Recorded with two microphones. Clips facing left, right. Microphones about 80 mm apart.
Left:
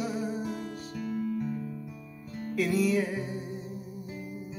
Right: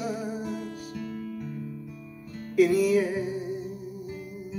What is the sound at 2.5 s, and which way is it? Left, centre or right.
Music, centre.